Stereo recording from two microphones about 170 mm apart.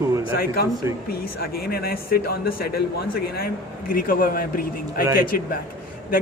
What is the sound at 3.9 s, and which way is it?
Speech, 55° left (ahead or behind).